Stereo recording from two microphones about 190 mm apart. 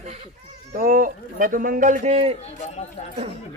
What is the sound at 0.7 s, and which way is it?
Speech, 50° right (ahead or behind).